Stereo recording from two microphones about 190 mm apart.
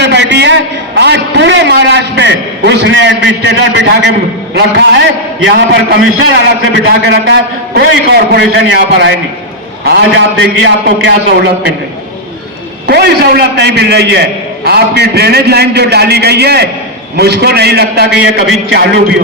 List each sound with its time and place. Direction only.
0.0 s a man's voice: 65° right (ahead or behind)
12.9 s a man's voice: 60° right (ahead or behind)